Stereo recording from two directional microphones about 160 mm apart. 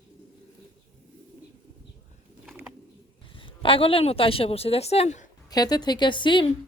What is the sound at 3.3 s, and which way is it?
A woman's voice, 35° left (ahead or behind).